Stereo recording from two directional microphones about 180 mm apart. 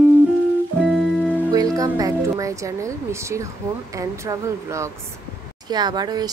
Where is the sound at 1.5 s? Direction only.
20° right (ahead or behind).